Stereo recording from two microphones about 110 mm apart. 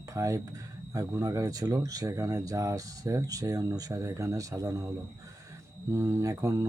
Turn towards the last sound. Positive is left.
turn(degrees=-30)  # may be behind; listen again after turning